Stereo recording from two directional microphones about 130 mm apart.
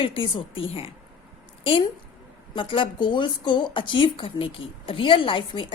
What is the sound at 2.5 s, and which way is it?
Speech, 40° left (ahead or behind).